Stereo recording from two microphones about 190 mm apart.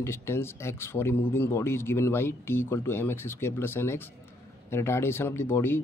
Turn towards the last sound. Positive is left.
turn(degrees=10)  # may be behind; listen again after turning